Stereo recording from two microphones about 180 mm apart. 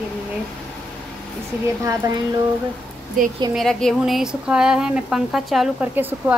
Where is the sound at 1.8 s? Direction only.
15° right (ahead or behind).